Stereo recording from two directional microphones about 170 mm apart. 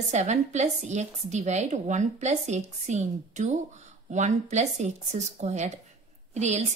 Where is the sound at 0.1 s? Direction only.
40° right (ahead or behind).